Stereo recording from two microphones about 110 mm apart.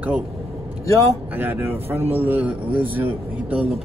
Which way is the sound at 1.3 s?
20° right (ahead or behind).